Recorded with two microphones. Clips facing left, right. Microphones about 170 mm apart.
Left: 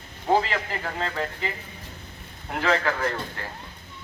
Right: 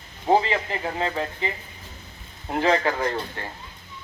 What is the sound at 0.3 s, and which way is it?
Speech, 25° right (ahead or behind).